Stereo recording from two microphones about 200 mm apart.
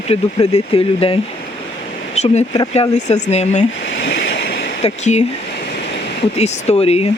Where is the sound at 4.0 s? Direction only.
65° left (ahead or behind).